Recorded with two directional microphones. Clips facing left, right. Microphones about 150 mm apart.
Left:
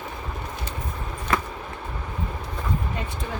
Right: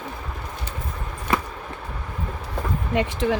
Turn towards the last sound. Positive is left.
turn(degrees=-90)